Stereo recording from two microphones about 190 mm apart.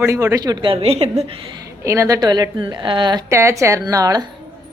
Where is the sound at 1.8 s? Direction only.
15° right (ahead or behind).